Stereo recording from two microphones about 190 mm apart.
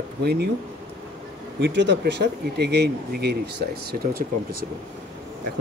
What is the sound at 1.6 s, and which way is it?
Speech, 65° right (ahead or behind).